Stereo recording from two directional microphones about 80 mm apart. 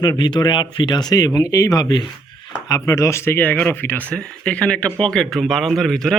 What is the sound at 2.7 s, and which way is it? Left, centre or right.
Speech, left.